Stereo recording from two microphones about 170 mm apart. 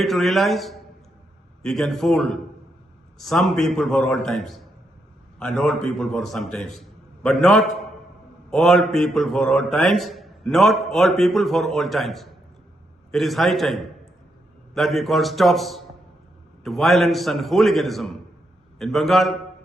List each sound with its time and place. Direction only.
0.0 s a man's voice: centre (ahead or behind)